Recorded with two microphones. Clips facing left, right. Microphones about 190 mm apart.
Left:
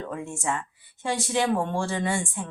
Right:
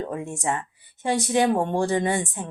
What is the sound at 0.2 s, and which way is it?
A woman's voice, 20° right (ahead or behind).